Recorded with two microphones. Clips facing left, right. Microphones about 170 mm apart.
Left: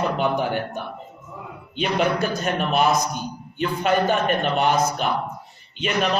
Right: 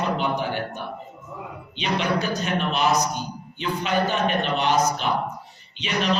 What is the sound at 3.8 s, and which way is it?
A man's voice, 50° left (ahead or behind).